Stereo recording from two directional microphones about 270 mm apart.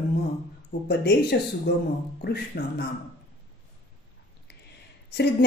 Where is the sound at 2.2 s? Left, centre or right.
Left.